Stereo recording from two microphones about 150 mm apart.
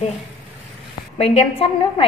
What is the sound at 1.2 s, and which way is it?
Speech, 40° left (ahead or behind).